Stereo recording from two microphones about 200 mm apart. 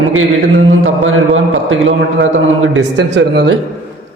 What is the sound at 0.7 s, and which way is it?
Mantra, 85° right.